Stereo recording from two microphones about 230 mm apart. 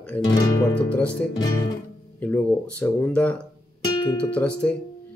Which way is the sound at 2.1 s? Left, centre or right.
Centre.